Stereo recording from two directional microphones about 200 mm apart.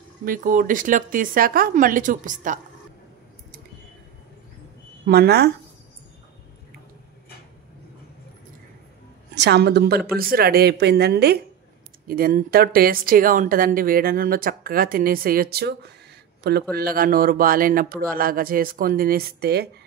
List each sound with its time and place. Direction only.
0.2 s speech: 45° right (ahead or behind)
5.0 s speech: 50° right (ahead or behind)
9.3 s a woman's voice: 60° right (ahead or behind)